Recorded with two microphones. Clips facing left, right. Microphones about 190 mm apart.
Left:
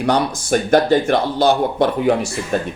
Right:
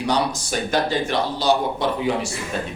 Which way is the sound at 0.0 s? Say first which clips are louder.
Left 4 dB; 55° left (ahead or behind).